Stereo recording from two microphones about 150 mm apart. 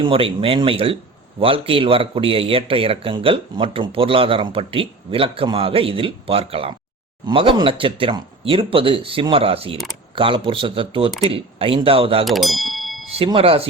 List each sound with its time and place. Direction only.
0.0 s speech: 35° right (ahead or behind)
12.2 s bell: centre (ahead or behind)
13.1 s speech: 40° right (ahead or behind)